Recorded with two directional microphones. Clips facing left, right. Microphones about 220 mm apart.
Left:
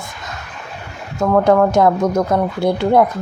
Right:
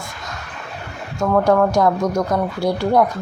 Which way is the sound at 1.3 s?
20° left (ahead or behind).